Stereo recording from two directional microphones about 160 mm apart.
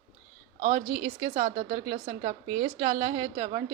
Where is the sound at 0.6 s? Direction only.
25° right (ahead or behind).